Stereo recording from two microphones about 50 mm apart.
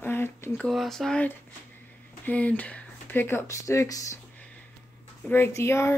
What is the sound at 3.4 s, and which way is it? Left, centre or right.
Speech, left.